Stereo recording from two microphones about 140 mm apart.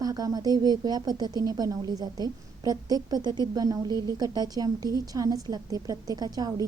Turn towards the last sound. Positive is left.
turn(degrees=-30)  # may be behind; listen again after turning